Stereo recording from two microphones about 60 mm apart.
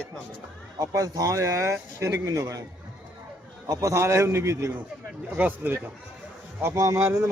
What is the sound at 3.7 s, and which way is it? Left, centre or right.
Speech, right.